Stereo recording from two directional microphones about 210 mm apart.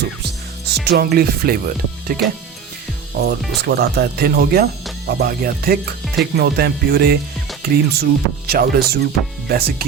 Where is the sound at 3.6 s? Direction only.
50° right (ahead or behind).